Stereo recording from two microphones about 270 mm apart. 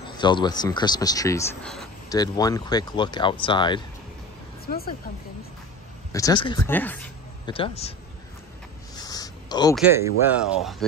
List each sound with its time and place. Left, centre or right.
0.2 s speech: centre
2.0 s speech: centre
4.6 s speech: left
6.1 s speech: centre
7.4 s speech: centre
8.9 s a sound: centre
9.8 s speech: centre